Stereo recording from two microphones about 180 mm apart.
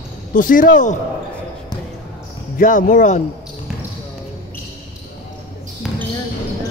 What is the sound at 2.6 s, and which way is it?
Speech, 50° left (ahead or behind).